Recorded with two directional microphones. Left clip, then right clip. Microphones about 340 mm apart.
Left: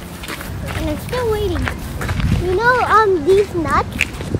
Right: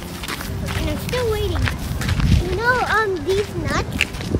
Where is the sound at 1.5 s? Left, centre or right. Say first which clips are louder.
Left 2 dB; centre.